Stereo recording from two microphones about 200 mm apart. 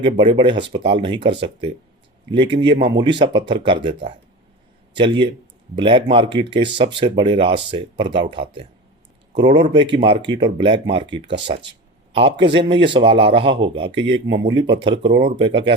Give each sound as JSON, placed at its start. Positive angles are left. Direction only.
{"t": 0.0, "sound": "speech", "side_deg": -25}
{"t": 9.7, "sound": "speech", "side_deg": -25}
{"t": 14.1, "sound": "speech", "side_deg": -70}
{"t": 14.4, "sound": "speech", "side_deg": -25}